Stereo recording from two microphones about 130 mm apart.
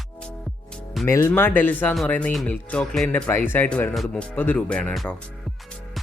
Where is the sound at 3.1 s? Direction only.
15° left (ahead or behind).